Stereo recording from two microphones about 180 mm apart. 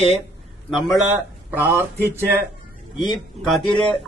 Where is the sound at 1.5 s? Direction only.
10° right (ahead or behind).